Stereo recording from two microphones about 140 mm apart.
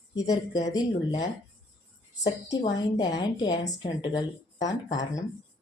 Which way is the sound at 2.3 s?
25° left (ahead or behind).